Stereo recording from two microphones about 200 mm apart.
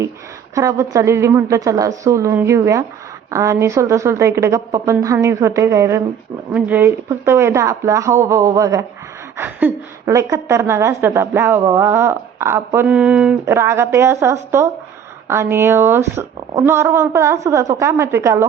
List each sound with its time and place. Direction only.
0.5 s a woman's voice: 15° right (ahead or behind)